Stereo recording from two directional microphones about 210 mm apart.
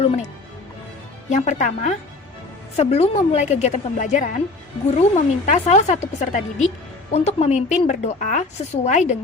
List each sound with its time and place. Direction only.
1.3 s a woman's voice: 35° left (ahead or behind)